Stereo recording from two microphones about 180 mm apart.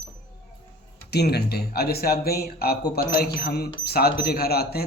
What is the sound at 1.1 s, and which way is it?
Speech, 65° left (ahead or behind).